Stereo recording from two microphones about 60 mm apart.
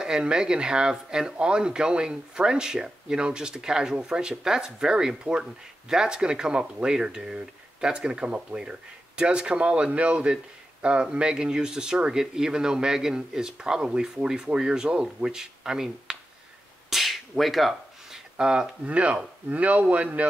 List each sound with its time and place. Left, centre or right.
0.0 s speech: centre
16.9 s beatboxing: centre
18.4 s speech: centre